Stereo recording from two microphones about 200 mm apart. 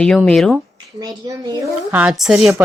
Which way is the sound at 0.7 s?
20° right (ahead or behind).